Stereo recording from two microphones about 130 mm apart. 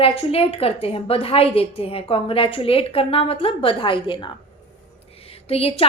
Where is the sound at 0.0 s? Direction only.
50° left (ahead or behind).